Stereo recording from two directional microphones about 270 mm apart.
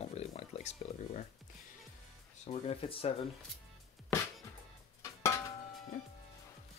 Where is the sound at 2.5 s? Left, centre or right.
Left.